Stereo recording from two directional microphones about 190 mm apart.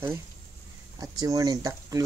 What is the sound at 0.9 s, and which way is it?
Speech, 20° right (ahead or behind).